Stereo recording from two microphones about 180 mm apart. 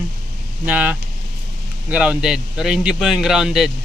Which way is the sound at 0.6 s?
10° right (ahead or behind).